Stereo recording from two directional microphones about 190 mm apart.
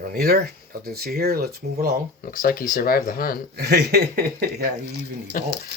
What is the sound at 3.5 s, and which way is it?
Speech, 55° right (ahead or behind).